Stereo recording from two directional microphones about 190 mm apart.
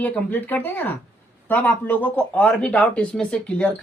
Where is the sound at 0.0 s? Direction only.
10° left (ahead or behind).